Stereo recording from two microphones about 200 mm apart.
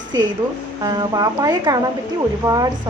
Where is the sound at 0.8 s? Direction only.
20° right (ahead or behind).